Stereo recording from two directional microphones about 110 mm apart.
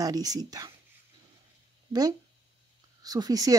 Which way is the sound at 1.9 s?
35° right (ahead or behind).